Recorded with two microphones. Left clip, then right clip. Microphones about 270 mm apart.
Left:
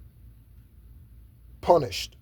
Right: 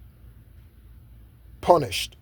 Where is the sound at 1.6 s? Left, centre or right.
Right.